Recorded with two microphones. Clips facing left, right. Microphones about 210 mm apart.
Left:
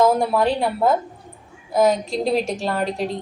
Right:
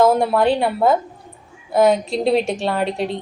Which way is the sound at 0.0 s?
Centre (ahead or behind).